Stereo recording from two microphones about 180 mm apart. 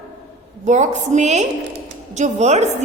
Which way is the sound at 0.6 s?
40° right (ahead or behind).